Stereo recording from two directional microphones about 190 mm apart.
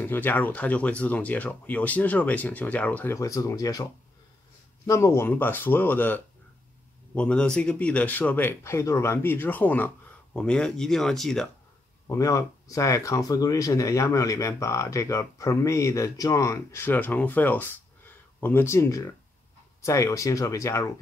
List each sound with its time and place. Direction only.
0.0 s speech: 10° left (ahead or behind)
12.1 s speech: 15° left (ahead or behind)